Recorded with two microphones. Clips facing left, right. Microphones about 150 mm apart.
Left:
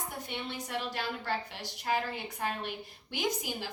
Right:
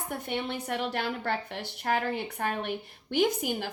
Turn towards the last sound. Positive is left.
turn(degrees=-55)  # may be behind; listen again after turning